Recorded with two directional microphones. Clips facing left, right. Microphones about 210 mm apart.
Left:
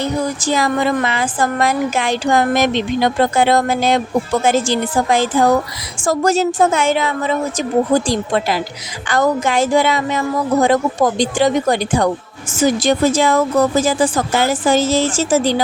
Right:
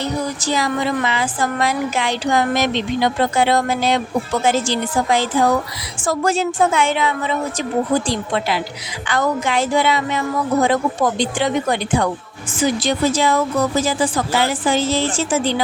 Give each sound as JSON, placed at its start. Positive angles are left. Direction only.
{"t": 0.0, "sound": "a woman's voice", "side_deg": 50}